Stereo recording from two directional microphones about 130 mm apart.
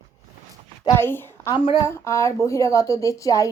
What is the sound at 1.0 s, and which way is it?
A woman's voice, 15° left (ahead or behind).